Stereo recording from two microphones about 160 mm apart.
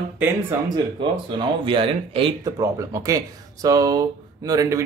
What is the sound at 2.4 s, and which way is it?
Speech, 20° right (ahead or behind).